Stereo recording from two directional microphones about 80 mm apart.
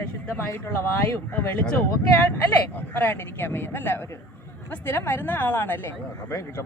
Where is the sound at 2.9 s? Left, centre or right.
Left.